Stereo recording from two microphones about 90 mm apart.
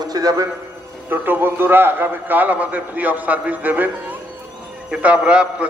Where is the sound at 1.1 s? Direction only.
20° right (ahead or behind).